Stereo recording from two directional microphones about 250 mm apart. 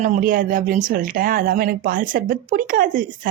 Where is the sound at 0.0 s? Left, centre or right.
Right.